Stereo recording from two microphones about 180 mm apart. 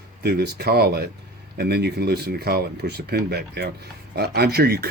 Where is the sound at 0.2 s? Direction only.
65° right (ahead or behind).